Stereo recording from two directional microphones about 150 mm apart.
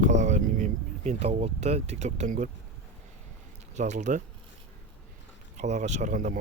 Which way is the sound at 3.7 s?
50° right (ahead or behind).